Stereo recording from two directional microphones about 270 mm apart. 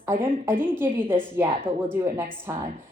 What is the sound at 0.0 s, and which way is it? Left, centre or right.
A woman's voice, centre.